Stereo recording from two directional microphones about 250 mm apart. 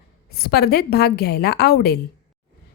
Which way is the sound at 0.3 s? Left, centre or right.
Left.